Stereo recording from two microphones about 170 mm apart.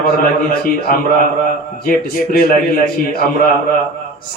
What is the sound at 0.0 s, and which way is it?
A man's voice, 60° left (ahead or behind).